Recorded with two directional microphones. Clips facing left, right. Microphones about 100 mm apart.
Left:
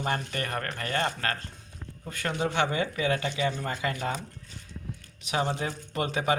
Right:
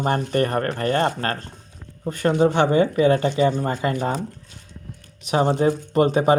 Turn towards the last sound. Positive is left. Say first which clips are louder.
# right 10 dB
turn(degrees=-40)  # may be behind; listen again after turning